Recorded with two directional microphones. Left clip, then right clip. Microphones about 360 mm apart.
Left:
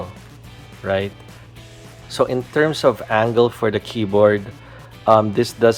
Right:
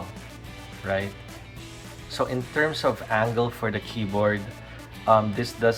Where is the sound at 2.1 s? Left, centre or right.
Left.